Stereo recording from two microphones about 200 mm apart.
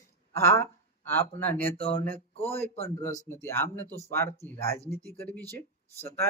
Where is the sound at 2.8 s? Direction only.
15° left (ahead or behind).